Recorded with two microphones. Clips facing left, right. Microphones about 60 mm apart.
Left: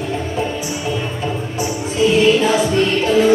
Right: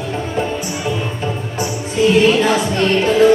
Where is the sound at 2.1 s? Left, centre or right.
Right.